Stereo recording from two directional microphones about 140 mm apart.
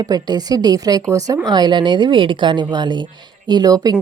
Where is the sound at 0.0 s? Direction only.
30° right (ahead or behind).